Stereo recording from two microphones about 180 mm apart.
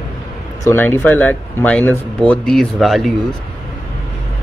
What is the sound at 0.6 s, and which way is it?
Speech, 15° left (ahead or behind).